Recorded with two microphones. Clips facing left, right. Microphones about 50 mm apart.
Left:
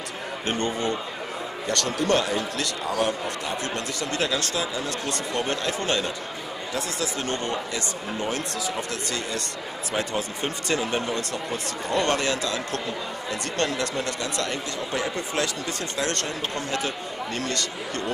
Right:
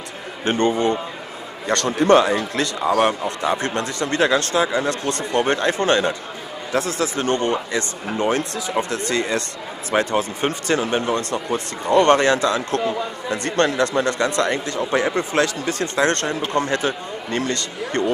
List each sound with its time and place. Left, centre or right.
0.5 s speech: right
2.9 s speech: right
3.6 s speech: right
9.9 s speech: right
11.1 s speech: right
14.9 s speech: right